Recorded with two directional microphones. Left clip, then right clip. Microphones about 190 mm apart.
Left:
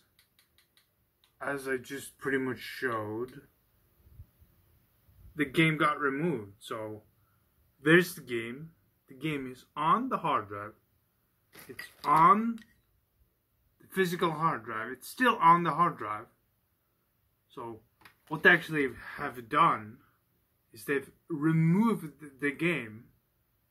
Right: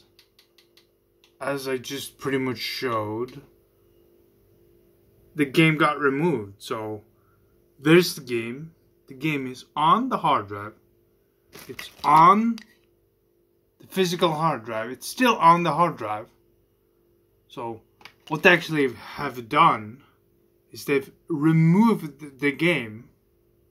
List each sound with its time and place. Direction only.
1.4 s speech: 20° right (ahead or behind)
5.3 s speech: 25° right (ahead or behind)
12.1 s speech: 30° right (ahead or behind)
13.7 s speech: 15° right (ahead or behind)
18.3 s speech: 20° right (ahead or behind)
20.8 s speech: 20° right (ahead or behind)